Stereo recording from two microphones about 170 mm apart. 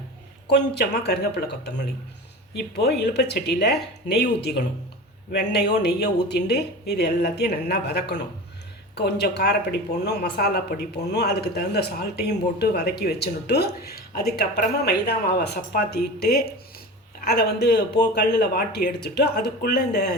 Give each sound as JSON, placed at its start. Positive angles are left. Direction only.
{"t": 0.4, "sound": "speech", "side_deg": 80}